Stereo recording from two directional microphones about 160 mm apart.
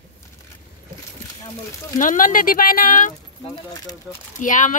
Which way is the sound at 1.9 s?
55° left (ahead or behind).